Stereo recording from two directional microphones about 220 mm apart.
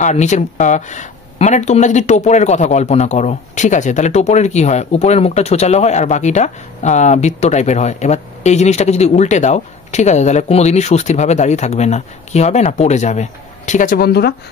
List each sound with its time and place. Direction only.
0.0 s speech: 30° left (ahead or behind)